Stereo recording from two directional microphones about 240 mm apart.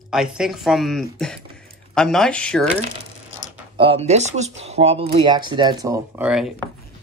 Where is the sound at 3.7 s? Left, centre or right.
Right.